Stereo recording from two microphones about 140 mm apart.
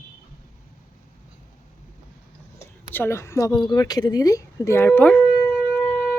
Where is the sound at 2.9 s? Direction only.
15° left (ahead or behind).